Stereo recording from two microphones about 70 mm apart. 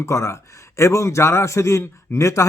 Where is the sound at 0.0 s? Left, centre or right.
Left.